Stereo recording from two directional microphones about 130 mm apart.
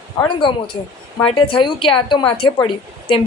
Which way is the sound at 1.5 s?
40° left (ahead or behind).